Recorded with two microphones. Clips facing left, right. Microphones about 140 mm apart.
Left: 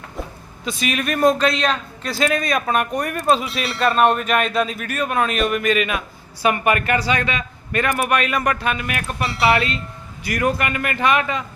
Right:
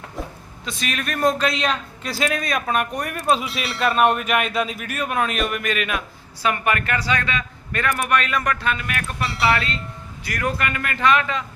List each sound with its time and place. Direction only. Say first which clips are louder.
0.6 s speech: left 5 dB; 5° left (ahead or behind)
6.4 s a man's voice: left 4 dB; 15° left (ahead or behind)
9.2 s speech: left 3 dB; centre (ahead or behind)
10.2 s a man's voice: left 4 dB; 10° left (ahead or behind)